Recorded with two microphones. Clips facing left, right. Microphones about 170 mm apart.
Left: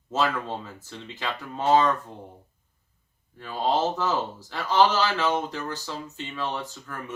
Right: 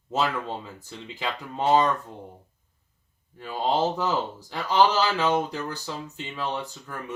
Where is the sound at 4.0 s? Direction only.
15° right (ahead or behind).